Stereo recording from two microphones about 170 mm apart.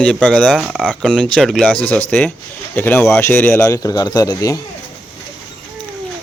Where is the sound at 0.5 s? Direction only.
5° right (ahead or behind); by 4.6 s 20° left (ahead or behind).